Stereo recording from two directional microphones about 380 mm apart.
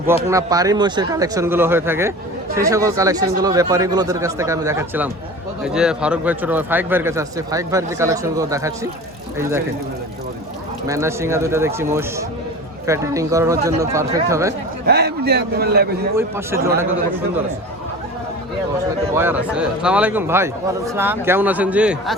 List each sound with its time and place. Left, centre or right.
0.3 s a man's voice: centre
10.8 s a man's voice: centre
14.8 s a man's voice: right
19.1 s a man's voice: centre